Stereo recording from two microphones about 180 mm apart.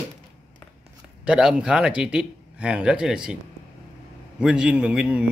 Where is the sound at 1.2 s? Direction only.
5° right (ahead or behind).